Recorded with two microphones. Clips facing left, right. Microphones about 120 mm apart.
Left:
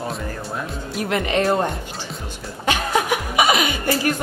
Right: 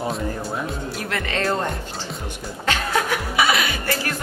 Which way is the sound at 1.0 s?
20° left (ahead or behind).